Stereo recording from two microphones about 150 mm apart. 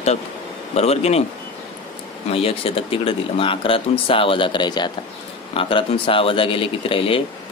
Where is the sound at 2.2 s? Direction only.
40° left (ahead or behind).